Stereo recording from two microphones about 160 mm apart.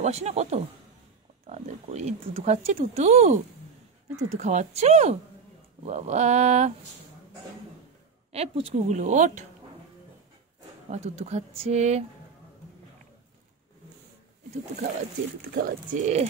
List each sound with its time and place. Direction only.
0.0 s speech: 45° right (ahead or behind)
8.3 s speech: 40° right (ahead or behind)
10.9 s speech: 45° right (ahead or behind)
15.5 s speech: 55° right (ahead or behind)